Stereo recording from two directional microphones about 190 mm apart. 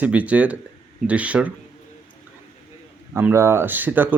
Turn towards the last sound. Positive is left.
turn(degrees=-10)  # may be behind; listen again after turning